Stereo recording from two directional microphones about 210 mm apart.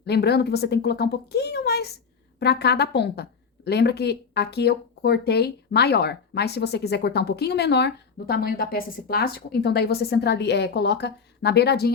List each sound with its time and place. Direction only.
0.0 s speech: 50° left (ahead or behind)